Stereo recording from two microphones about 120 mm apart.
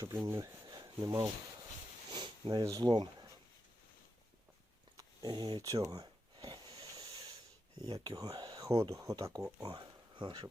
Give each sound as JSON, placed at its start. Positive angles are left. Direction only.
{"t": 0.3, "sound": "speech", "side_deg": -30}
{"t": 4.9, "sound": "a sound", "side_deg": -35}
{"t": 7.8, "sound": "speech", "side_deg": -35}
{"t": 9.6, "sound": "speech", "side_deg": -40}